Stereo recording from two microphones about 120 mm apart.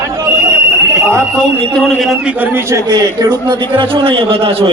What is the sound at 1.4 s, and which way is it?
A man's voice, 5° left (ahead or behind).